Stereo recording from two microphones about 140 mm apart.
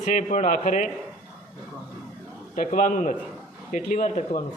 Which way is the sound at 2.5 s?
70° left (ahead or behind).